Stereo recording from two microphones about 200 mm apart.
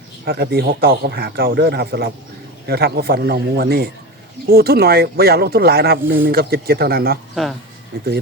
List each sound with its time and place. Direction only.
0.3 s speech: 50° right (ahead or behind)